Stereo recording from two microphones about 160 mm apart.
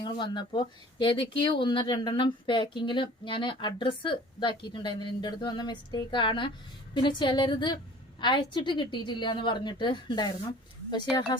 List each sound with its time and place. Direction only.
0.0 s speech: 30° left (ahead or behind)